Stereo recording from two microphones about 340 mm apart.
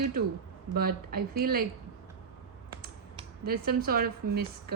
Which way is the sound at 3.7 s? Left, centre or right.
Right.